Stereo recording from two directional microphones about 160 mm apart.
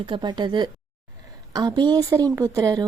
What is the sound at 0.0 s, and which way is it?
A woman's voice, 30° right (ahead or behind).